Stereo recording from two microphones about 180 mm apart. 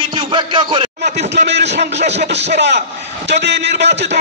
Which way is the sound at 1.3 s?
70° right (ahead or behind).